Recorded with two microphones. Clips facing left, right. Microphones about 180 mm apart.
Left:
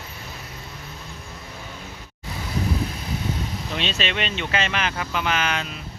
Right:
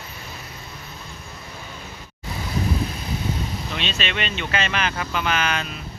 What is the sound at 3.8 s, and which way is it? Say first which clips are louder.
Speech: left 2 dB; 35° left (ahead or behind).